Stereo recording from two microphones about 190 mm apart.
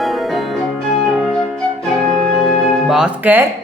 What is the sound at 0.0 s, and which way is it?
Music, centre (ahead or behind).